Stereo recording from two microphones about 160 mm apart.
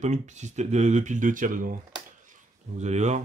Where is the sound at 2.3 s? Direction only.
50° right (ahead or behind).